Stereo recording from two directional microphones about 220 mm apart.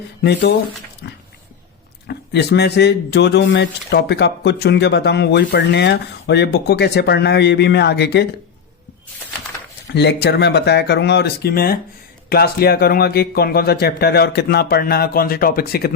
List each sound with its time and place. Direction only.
0.2 s speech: 50° left (ahead or behind)
1.0 s a sound: 50° left (ahead or behind)
2.0 s speech: 50° left (ahead or behind)
9.8 s speech: 50° left (ahead or behind)